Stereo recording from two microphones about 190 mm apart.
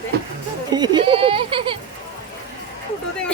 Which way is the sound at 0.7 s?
20° right (ahead or behind).